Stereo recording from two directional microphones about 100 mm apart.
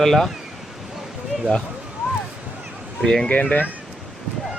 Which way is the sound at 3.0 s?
5° left (ahead or behind).